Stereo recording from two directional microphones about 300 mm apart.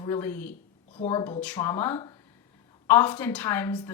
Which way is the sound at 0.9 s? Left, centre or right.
Centre.